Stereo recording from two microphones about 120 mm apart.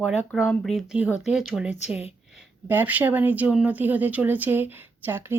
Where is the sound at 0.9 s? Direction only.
10° right (ahead or behind).